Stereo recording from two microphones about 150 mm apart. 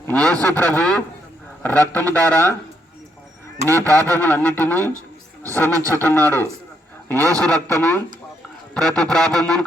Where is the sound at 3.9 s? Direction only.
20° right (ahead or behind).